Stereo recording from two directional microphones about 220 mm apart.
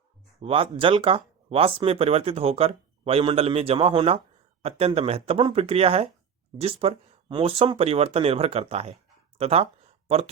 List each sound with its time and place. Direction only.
0.3 s speech: 25° right (ahead or behind)